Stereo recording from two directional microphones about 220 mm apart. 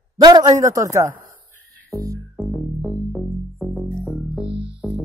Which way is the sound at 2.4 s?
5° left (ahead or behind).